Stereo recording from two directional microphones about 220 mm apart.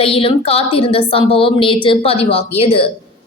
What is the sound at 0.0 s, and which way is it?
A woman's voice, 25° left (ahead or behind).